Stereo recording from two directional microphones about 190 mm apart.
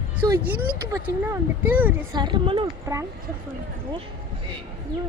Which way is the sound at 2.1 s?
25° right (ahead or behind).